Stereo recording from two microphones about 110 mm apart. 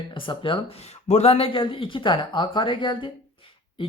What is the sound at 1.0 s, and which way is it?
Speech, 80° left.